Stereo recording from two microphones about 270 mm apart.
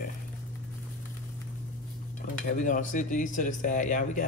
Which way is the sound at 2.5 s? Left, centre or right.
Left.